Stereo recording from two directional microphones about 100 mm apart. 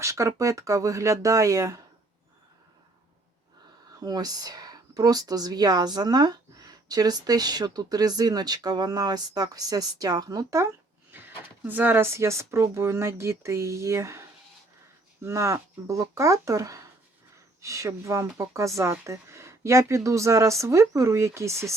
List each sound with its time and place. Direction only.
0.0 s speech: 30° right (ahead or behind)
4.0 s speech: 40° right (ahead or behind)
11.1 s a woman's voice: 20° right (ahead or behind)